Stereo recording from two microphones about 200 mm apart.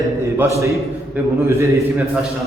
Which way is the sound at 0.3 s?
15° right (ahead or behind).